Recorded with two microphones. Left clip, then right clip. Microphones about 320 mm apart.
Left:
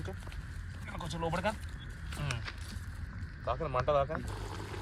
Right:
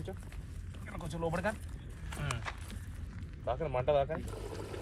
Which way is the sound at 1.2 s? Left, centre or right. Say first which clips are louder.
Left 1 dB; left.